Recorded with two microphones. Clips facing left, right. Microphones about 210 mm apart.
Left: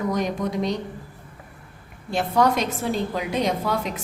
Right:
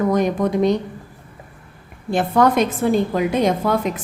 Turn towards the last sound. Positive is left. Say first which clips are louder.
# right 6 dB
turn(degrees=-50)  # may be behind; listen again after turning